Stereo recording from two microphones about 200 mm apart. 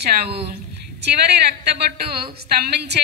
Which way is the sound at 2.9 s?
55° right (ahead or behind).